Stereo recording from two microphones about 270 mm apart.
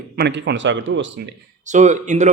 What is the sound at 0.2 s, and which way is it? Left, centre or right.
Speech, right.